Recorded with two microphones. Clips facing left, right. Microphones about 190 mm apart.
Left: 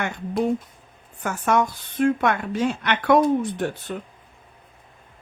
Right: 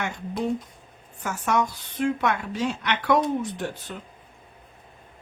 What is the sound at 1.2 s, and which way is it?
Speech, 55° left (ahead or behind).